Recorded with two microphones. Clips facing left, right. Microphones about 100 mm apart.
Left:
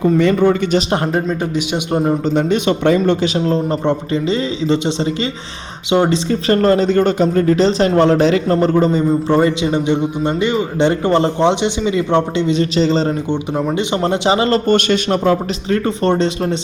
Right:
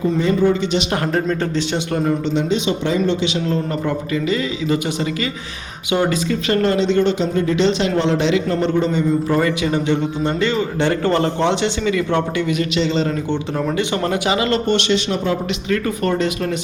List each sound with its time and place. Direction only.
0.2 s a man's voice: 65° left (ahead or behind)
1.1 s a man's voice: 10° left (ahead or behind)
1.9 s a man's voice: 25° left (ahead or behind)
2.3 s a man's voice: 55° left (ahead or behind)
3.4 s a man's voice: 30° left (ahead or behind)
9.4 s a man's voice: 25° left (ahead or behind)
13.3 s speech: 15° left (ahead or behind); by 15.4 s 50° left (ahead or behind)
15.7 s a man's voice: 30° left (ahead or behind)